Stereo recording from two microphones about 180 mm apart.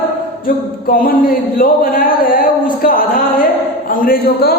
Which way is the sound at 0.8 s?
50° left (ahead or behind).